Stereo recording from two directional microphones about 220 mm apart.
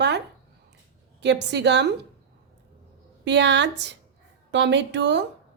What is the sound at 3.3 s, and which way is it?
Speech, 55° right (ahead or behind).